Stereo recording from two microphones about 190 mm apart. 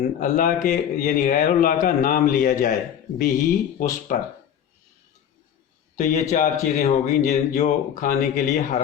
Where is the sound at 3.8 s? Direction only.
45° left (ahead or behind).